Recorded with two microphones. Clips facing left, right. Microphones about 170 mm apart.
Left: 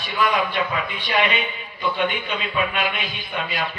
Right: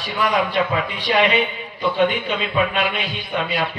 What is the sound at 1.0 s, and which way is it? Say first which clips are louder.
Speech: right 5 dB; 35° right (ahead or behind).